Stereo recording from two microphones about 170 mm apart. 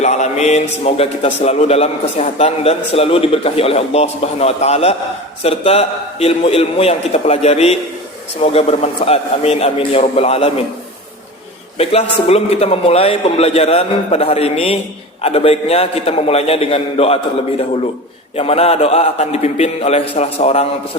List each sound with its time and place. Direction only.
0.0 s a man's voice: 40° left (ahead or behind)
11.8 s a man's voice: 35° left (ahead or behind)
18.3 s a man's voice: 35° left (ahead or behind)